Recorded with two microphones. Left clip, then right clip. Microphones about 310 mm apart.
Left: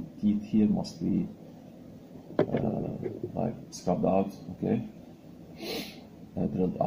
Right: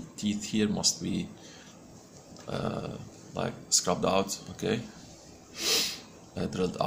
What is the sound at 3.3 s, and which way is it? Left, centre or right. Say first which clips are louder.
Speech: right 5 dB; right.